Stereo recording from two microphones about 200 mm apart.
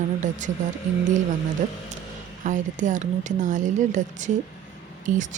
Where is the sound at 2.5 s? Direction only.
40° right (ahead or behind).